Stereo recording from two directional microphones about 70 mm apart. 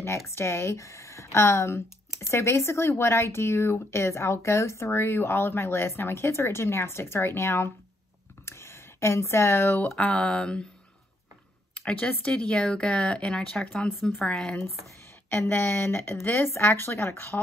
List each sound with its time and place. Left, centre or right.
0.4 s speech: left
8.5 s a sound: left
9.9 s speech: centre
11.7 s speech: centre
15.2 s speech: left